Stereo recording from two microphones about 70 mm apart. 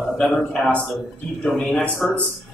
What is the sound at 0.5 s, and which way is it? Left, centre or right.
Speech, centre.